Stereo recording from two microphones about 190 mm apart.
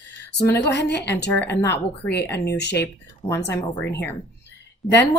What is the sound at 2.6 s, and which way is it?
Speech, 65° left (ahead or behind).